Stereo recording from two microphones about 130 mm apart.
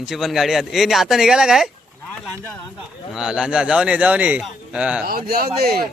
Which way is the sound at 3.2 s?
5° right (ahead or behind).